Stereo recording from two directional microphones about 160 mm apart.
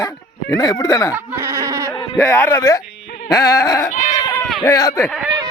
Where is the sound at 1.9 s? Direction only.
20° left (ahead or behind).